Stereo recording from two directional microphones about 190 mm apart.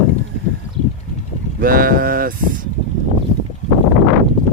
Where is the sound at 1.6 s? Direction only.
50° right (ahead or behind).